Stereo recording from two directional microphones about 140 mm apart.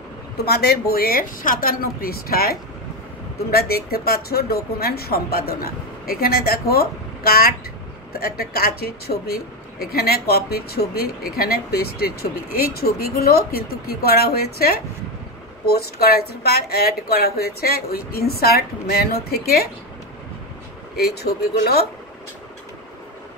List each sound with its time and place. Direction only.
0.6 s speech: 90° left